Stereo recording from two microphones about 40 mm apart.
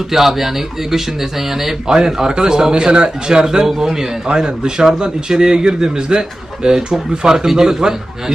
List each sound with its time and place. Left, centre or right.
0.1 s a man's voice: centre